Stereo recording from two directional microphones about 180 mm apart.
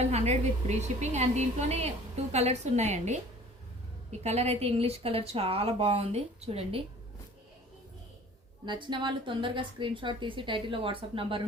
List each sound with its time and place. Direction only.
0.1 s speech: 40° right (ahead or behind)
4.2 s speech: 35° right (ahead or behind)
8.6 s a woman's voice: 25° right (ahead or behind)